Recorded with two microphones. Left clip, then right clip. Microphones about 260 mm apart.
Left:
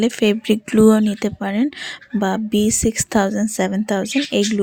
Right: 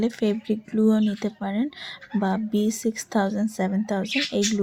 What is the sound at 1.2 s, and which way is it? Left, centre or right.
Speech, left.